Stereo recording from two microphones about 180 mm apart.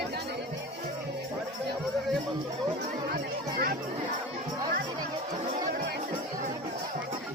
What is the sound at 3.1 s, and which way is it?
Music, 55° right (ahead or behind).